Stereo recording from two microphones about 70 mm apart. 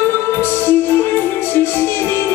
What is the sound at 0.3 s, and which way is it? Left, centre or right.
Music, left.